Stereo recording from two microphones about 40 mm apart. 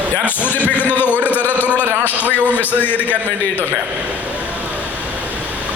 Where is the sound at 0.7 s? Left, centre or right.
Left.